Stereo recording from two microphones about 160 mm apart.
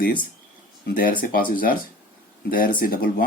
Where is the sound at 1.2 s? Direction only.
60° left (ahead or behind).